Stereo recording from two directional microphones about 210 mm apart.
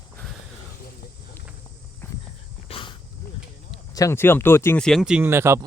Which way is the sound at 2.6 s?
25° left (ahead or behind).